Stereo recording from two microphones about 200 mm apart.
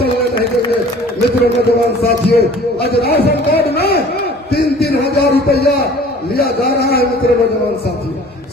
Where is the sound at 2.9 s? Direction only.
55° left (ahead or behind).